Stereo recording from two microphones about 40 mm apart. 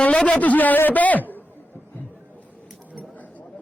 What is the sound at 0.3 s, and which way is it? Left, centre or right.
A man's voice, left.